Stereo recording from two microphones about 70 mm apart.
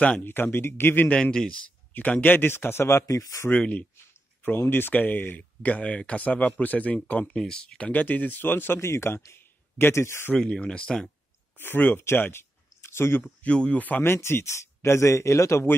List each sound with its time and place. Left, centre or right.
0.2 s speech: left
1.0 s speech: centre
2.0 s speech: left
3.5 s speech: centre
4.4 s speech: left
10.3 s speech: centre
11.5 s speech: left
12.0 s a sound: left
13.2 s speech: centre
14.1 s speech: left